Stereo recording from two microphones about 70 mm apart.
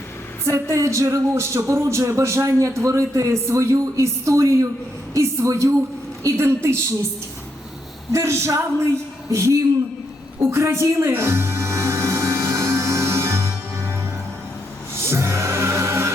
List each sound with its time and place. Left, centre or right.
0.4 s speech: right
8.1 s speech: right
10.4 s music: right
15.0 s music: right